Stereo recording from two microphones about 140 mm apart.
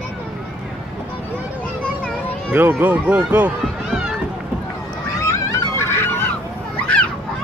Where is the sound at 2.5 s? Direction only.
15° right (ahead or behind).